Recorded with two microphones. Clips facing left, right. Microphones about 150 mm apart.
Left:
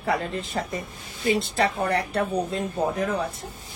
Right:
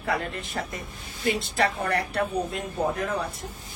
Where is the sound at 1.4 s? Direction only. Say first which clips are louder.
Left 2 dB; 30° left (ahead or behind).